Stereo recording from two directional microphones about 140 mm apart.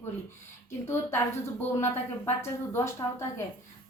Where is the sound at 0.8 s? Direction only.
20° left (ahead or behind).